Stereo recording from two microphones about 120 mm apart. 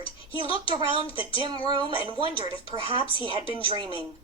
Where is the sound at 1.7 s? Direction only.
40° right (ahead or behind).